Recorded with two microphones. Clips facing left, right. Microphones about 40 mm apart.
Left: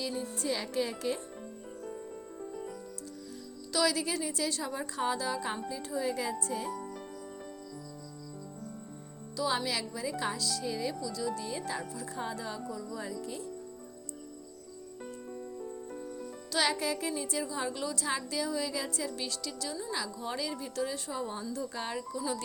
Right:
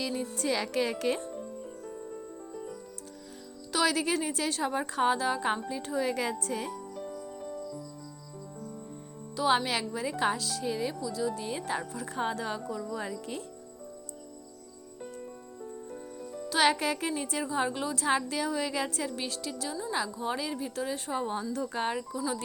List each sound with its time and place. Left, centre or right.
0.3 s speech: right
3.7 s a woman's voice: right
5.6 s speech: right
6.9 s music: centre
9.3 s speech: right
11.5 s speech: right
16.6 s a woman's voice: right
19.1 s speech: right
21.1 s speech: right
22.1 s speech: right